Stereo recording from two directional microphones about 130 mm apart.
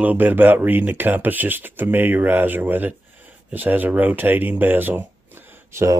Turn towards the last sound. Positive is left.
turn(degrees=-20)  # may be behind; listen again after turning